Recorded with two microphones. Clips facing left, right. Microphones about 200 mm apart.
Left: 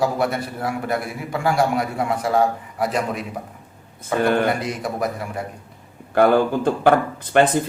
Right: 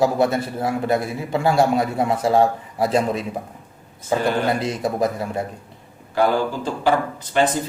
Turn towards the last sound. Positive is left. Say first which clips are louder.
# left 3 dB
turn(degrees=55)  # may be behind; listen again after turning